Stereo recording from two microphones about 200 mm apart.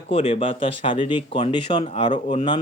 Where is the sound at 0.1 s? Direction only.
25° left (ahead or behind).